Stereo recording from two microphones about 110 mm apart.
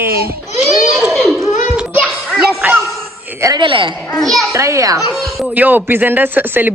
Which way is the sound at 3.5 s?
50° right (ahead or behind).